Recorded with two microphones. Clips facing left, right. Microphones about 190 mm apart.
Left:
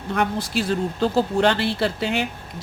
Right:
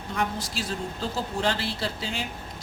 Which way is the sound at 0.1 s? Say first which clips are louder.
Left 7 dB; 60° left (ahead or behind).